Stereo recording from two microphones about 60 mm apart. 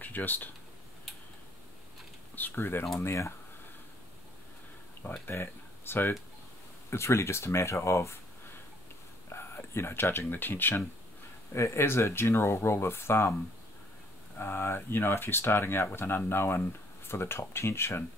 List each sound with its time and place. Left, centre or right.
0.0 s speech: left
2.3 s speech: left
5.2 s speech: left
9.3 s speech: left
11.5 s speech: left
14.4 s speech: left